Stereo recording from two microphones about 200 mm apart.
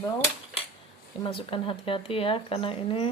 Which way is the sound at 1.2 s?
25° left (ahead or behind).